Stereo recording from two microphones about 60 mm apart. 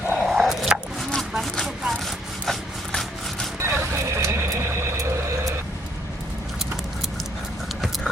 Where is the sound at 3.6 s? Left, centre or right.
Right.